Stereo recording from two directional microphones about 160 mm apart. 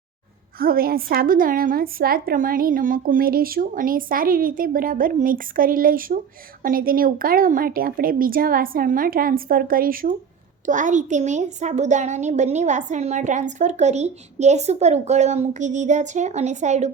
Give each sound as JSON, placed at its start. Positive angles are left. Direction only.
{"t": 0.6, "sound": "a woman's voice", "side_deg": -70}
{"t": 10.7, "sound": "a woman's voice", "side_deg": -50}